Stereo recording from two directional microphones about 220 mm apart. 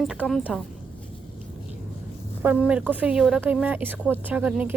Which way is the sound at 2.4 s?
5° right (ahead or behind).